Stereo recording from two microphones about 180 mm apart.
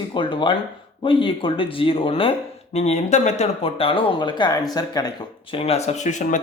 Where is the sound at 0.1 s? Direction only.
25° left (ahead or behind).